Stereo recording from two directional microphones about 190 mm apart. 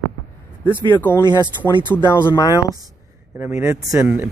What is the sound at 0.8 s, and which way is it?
Speech, 10° left (ahead or behind).